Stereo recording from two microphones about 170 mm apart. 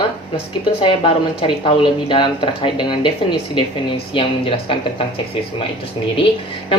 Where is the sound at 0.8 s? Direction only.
30° left (ahead or behind).